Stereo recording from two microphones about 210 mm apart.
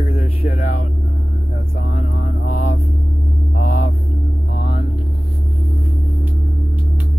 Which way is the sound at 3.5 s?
40° left (ahead or behind).